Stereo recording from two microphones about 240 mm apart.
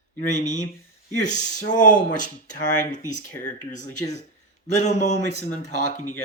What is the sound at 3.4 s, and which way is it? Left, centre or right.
Speech, left.